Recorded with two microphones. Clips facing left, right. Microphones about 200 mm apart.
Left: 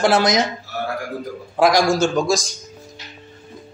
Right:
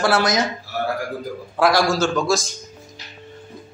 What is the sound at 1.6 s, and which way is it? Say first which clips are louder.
Speech: left 2 dB; 15° left (ahead or behind).